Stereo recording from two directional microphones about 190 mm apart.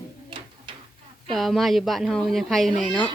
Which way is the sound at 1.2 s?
Centre (ahead or behind).